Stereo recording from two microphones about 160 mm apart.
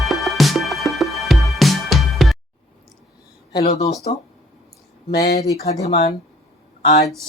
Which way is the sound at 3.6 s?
45° left (ahead or behind).